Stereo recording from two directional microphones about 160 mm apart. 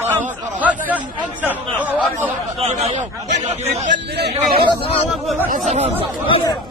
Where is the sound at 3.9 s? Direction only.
90° right.